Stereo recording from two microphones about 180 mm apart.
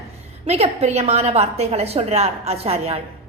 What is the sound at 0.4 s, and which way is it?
A woman's voice, 35° right (ahead or behind).